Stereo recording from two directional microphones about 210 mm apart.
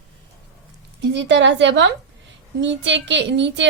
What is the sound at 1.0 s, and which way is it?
A woman's voice, 55° right (ahead or behind).